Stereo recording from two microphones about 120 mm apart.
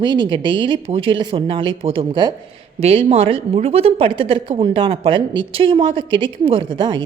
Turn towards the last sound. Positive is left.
turn(degrees=-40)  # may be behind; listen again after turning